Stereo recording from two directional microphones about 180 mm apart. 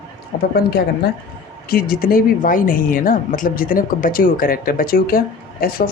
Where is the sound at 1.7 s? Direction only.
55° left (ahead or behind).